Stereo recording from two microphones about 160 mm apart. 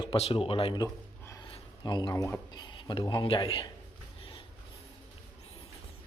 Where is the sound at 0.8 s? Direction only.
20° left (ahead or behind).